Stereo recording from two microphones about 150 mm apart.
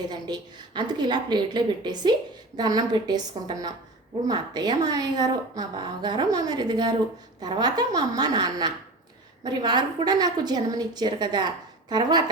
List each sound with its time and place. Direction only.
0.1 s a woman's voice: 30° right (ahead or behind)